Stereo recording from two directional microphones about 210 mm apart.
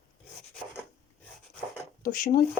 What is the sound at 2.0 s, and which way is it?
Speech, 40° left (ahead or behind).